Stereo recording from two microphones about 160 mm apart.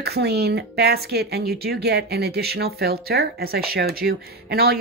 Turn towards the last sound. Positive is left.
turn(degrees=-75)  # may be behind; listen again after turning